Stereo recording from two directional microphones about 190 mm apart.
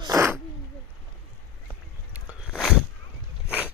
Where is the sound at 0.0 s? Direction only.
15° right (ahead or behind).